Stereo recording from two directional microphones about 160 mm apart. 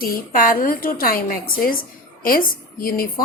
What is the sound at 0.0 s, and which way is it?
A woman's voice, 65° left (ahead or behind).